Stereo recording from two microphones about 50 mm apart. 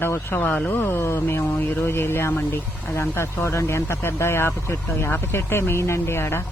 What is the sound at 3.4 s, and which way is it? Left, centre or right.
Speech, left.